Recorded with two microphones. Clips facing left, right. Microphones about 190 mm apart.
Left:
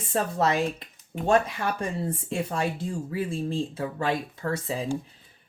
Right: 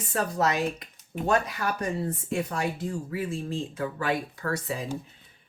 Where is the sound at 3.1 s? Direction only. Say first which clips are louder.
Left 5 dB; 30° left (ahead or behind).